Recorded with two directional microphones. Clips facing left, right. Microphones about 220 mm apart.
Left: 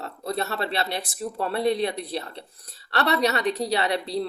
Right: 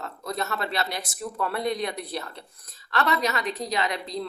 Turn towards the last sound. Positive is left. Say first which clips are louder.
# left 4 dB
turn(degrees=35)  # may be behind; listen again after turning